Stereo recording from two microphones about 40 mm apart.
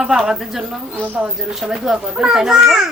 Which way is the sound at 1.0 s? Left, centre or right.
Right.